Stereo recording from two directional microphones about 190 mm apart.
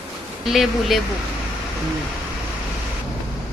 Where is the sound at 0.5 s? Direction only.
Centre (ahead or behind).